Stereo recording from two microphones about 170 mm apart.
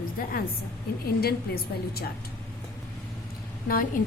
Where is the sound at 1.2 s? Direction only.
65° left (ahead or behind).